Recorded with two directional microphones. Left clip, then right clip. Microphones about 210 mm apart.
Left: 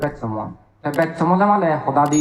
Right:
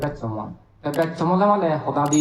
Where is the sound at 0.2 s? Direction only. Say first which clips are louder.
Left 4 dB; 20° left (ahead or behind).